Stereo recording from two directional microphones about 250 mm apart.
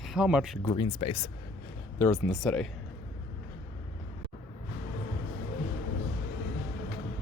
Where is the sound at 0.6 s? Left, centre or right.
Centre.